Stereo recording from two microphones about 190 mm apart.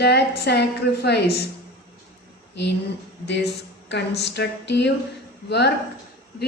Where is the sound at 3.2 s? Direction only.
65° left (ahead or behind).